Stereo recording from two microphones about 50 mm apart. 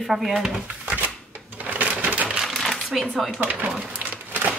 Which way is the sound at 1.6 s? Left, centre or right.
Right.